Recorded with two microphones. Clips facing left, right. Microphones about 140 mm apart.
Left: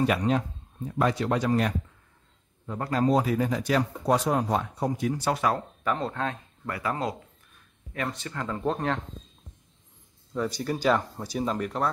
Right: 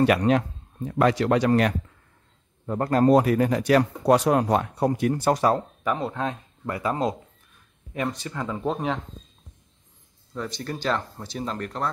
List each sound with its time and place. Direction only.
0.0 s speech: 75° right (ahead or behind)
0.8 s speech: 85° right
2.6 s speech: 50° right (ahead or behind)
5.3 s speech: 35° right (ahead or behind)
5.9 s speech: 15° right (ahead or behind)
10.3 s speech: 5° left (ahead or behind)